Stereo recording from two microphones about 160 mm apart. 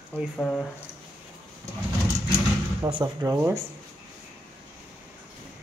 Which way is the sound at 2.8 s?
25° right (ahead or behind).